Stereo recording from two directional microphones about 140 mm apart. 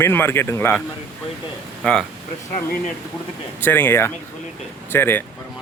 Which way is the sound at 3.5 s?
15° left (ahead or behind).